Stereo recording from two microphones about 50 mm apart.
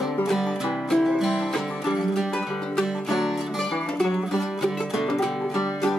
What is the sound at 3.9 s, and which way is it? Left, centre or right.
Music, centre.